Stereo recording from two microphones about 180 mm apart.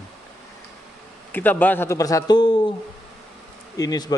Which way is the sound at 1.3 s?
10° left (ahead or behind).